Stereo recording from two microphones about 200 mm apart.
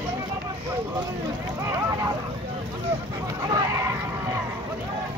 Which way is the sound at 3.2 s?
15° right (ahead or behind).